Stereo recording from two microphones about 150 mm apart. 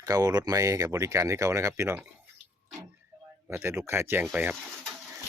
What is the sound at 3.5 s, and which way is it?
Speech, 15° right (ahead or behind).